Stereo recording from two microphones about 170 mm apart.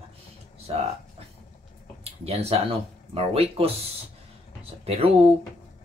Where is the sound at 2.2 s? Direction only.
35° right (ahead or behind).